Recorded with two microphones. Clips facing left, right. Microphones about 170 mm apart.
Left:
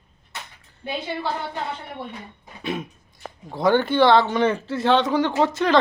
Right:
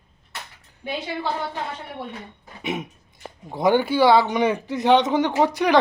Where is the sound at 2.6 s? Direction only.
20° right (ahead or behind).